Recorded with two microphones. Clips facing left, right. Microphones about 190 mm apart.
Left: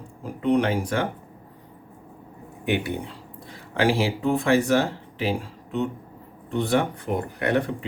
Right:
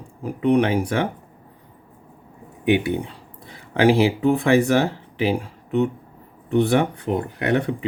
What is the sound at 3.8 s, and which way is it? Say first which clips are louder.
Speech: right 6 dB; 60° right (ahead or behind).